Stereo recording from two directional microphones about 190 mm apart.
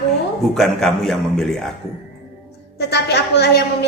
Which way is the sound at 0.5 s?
Centre (ahead or behind).